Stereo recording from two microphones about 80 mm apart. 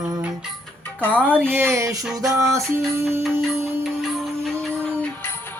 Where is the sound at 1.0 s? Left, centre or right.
Centre.